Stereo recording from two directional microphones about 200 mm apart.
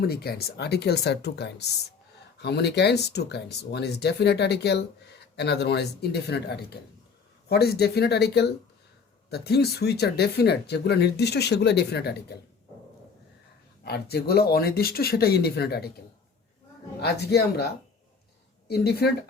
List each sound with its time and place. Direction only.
0.0 s speech: 50° left (ahead or behind)
13.8 s speech: 55° left (ahead or behind)
17.0 s speech: 55° left (ahead or behind)
18.7 s speech: 55° left (ahead or behind)